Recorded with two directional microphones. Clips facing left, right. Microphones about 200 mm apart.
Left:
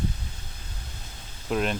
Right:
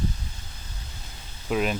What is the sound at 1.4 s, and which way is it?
Speech, 5° right (ahead or behind).